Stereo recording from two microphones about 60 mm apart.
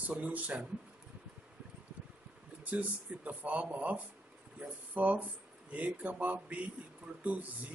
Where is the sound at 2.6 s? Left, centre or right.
Right.